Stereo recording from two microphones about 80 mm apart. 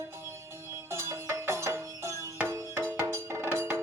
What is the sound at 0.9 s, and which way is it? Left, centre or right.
Music, right.